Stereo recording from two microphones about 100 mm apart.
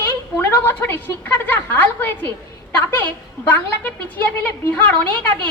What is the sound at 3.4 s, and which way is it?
A woman's voice, 20° left (ahead or behind).